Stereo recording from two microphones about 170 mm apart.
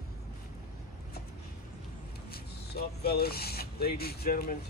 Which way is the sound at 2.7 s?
65° left (ahead or behind).